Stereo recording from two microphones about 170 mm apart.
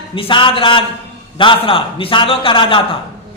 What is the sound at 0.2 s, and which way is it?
A woman's voice, 30° left (ahead or behind).